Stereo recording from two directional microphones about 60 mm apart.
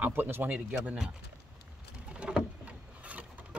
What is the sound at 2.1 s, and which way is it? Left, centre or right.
Pigeon, centre.